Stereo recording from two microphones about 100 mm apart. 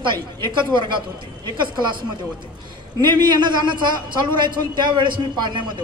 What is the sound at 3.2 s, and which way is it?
A man's voice, 50° right (ahead or behind).